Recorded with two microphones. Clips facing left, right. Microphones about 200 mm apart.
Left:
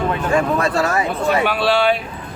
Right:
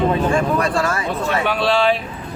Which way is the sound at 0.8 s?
20° left (ahead or behind).